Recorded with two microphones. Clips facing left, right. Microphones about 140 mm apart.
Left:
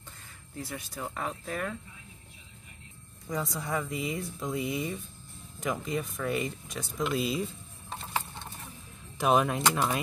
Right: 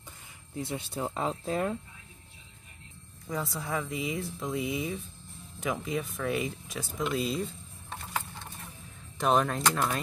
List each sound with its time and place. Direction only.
0.6 s speech: 25° right (ahead or behind)
3.3 s speech: centre (ahead or behind)
9.2 s speech: 5° left (ahead or behind)